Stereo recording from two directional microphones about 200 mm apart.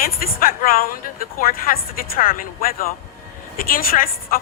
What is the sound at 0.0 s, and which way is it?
Speech, 45° left (ahead or behind).